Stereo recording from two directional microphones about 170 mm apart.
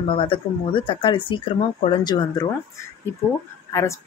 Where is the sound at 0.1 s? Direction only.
30° left (ahead or behind).